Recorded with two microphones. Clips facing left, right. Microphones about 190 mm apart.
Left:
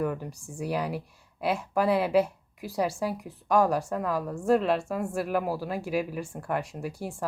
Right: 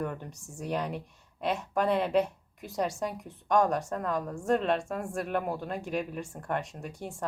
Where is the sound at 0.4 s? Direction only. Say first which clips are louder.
Left 2 dB; 10° left (ahead or behind).